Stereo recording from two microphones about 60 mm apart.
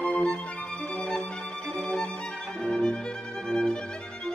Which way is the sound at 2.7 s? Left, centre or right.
Centre.